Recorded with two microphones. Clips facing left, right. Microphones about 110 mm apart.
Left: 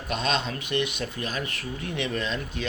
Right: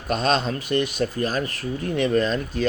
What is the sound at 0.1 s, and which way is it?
Speech, 45° right (ahead or behind).